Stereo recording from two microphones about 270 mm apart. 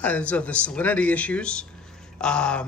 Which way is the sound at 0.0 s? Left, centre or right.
Centre.